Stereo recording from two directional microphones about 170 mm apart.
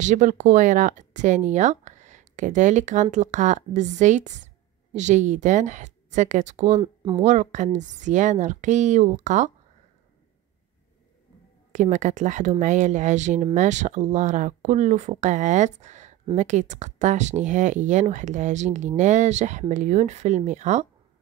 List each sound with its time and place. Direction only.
0.0 s speech: 45° right (ahead or behind)
11.7 s speech: 45° right (ahead or behind)